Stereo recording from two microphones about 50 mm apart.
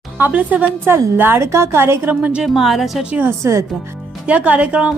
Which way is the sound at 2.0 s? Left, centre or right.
Right.